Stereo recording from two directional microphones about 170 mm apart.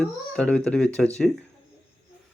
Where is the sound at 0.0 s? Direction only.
5° left (ahead or behind).